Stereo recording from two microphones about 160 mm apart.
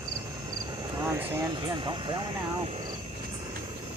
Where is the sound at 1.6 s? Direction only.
30° right (ahead or behind).